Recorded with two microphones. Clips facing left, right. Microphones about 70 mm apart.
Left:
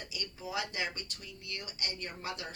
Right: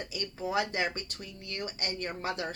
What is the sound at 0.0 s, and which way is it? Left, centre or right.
A woman's voice, right.